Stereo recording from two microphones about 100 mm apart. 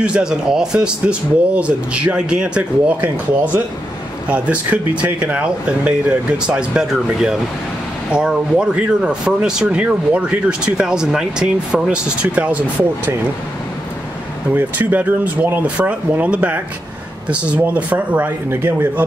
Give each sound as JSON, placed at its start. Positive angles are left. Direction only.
{"t": 0.0, "sound": "speech", "side_deg": -10}
{"t": 4.3, "sound": "speech", "side_deg": -15}
{"t": 14.5, "sound": "speech", "side_deg": -20}